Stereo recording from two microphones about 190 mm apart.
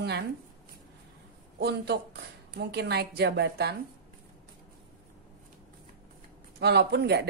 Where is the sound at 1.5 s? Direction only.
60° right (ahead or behind).